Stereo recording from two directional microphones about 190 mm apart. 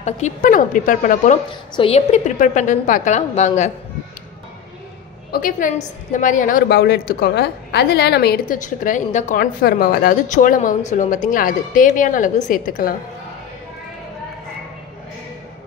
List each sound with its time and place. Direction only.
0.0 s a woman's voice: 40° left (ahead or behind)
5.3 s a woman's voice: 45° left (ahead or behind)